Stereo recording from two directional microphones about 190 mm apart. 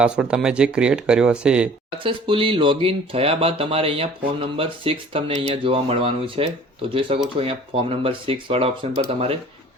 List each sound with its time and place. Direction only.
0.0 s speech: 5° right (ahead or behind)
2.0 s speech: 25° right (ahead or behind)